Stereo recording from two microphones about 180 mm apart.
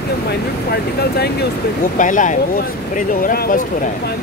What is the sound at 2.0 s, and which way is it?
Speech, 45° left (ahead or behind).